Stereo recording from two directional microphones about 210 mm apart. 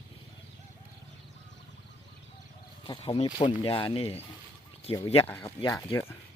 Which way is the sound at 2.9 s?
25° left (ahead or behind).